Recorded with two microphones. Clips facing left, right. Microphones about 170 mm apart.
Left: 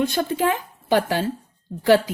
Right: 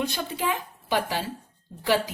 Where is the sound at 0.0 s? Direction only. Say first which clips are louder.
Left 7 dB; 50° left (ahead or behind).